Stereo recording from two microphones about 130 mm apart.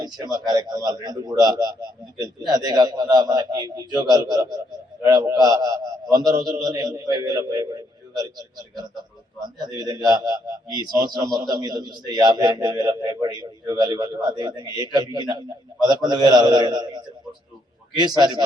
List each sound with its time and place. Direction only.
0.0 s a man's voice: 30° right (ahead or behind)